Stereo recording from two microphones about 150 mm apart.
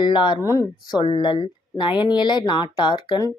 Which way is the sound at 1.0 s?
35° left (ahead or behind).